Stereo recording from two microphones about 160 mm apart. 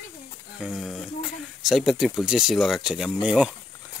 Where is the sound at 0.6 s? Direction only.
Centre (ahead or behind).